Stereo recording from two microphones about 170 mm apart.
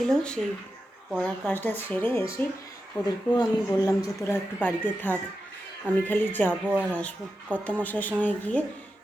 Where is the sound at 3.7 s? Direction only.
20° left (ahead or behind).